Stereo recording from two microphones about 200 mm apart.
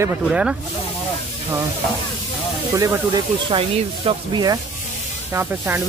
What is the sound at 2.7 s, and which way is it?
Speech, 15° right (ahead or behind).